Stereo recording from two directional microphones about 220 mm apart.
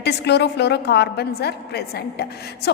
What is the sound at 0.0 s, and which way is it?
A woman's voice, 50° left (ahead or behind).